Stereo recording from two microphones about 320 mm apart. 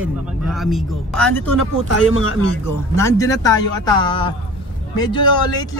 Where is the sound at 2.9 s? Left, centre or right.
Centre.